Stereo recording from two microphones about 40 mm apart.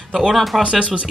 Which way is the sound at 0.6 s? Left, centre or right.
Right.